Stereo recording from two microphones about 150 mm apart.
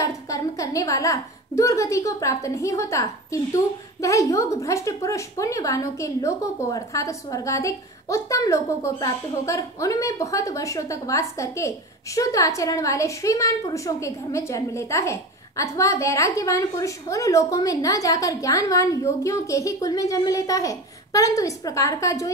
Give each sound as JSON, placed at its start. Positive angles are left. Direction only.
{"t": 0.0, "sound": "a woman's voice", "side_deg": 20}